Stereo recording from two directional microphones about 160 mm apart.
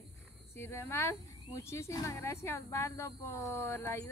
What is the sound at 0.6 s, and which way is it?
Speech, 15° left (ahead or behind).